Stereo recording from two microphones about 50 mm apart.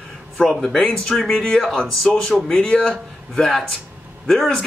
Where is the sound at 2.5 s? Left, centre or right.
Centre.